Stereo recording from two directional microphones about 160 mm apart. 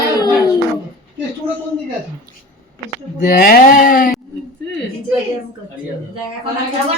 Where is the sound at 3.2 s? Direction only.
60° left (ahead or behind).